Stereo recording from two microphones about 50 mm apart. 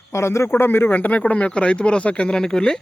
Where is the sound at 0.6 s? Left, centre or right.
Left.